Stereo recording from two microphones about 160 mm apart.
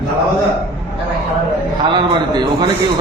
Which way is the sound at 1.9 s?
25° right (ahead or behind).